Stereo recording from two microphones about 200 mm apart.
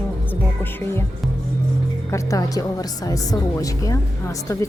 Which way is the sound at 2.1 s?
15° left (ahead or behind).